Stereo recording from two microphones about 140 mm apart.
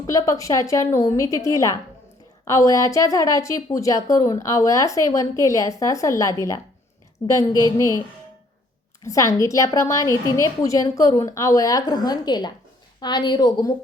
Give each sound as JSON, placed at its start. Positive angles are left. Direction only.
{"t": 0.1, "sound": "a woman's voice", "side_deg": 25}
{"t": 9.0, "sound": "a woman's voice", "side_deg": 20}